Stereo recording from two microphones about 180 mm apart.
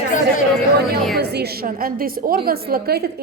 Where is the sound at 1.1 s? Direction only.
65° right (ahead or behind).